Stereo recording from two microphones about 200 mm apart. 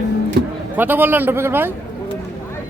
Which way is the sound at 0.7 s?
10° right (ahead or behind).